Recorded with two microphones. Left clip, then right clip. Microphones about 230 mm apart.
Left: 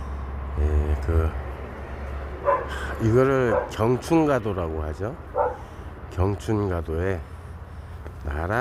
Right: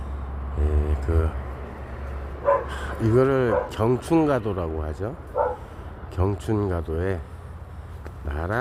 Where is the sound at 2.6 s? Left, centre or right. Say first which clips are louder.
Even; centre.